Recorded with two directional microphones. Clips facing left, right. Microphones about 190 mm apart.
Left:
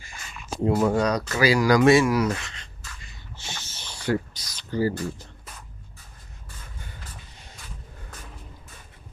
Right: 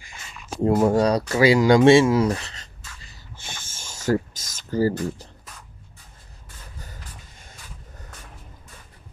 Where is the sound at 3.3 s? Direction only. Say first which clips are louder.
Left 1 dB; 50° right (ahead or behind).